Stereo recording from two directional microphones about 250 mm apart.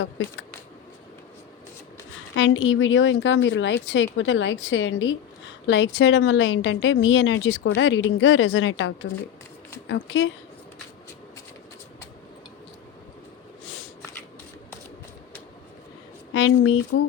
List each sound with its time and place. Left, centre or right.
2.3 s a woman's voice: left
16.3 s a woman's voice: left